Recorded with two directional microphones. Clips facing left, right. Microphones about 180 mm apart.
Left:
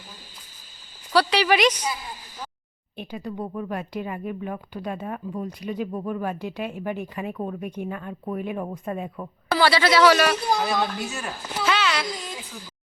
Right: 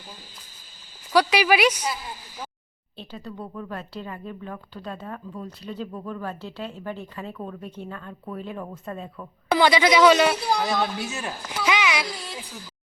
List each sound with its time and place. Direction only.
1.1 s speech: 10° right (ahead or behind)
3.0 s speech: 15° left (ahead or behind)
9.5 s speech: 15° right (ahead or behind)
10.6 s speech: centre (ahead or behind)
11.4 s a sound: 15° right (ahead or behind)